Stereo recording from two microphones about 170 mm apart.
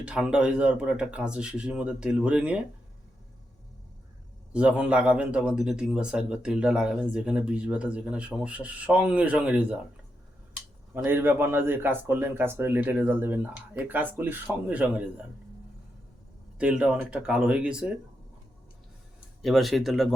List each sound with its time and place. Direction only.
0.0 s a man's voice: 5° right (ahead or behind)
4.5 s a man's voice: 5° right (ahead or behind)
10.9 s a man's voice: 10° right (ahead or behind)
16.6 s a man's voice: 5° right (ahead or behind)
19.4 s a man's voice: centre (ahead or behind)